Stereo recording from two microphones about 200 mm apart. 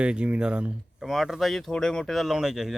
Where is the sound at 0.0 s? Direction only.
5° right (ahead or behind).